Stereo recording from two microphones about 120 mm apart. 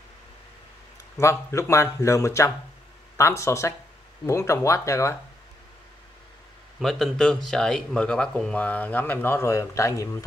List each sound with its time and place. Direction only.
1.1 s speech: 25° left (ahead or behind)
6.8 s speech: centre (ahead or behind); by 10.2 s 25° left (ahead or behind)